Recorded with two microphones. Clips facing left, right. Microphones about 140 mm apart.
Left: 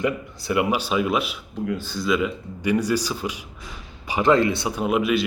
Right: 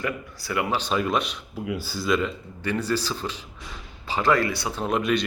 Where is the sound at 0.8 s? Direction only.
5° left (ahead or behind).